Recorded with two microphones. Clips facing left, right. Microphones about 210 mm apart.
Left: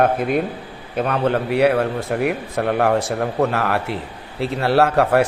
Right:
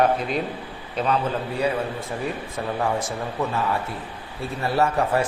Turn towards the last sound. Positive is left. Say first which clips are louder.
# left 6 dB
turn(degrees=70)  # may be behind; listen again after turning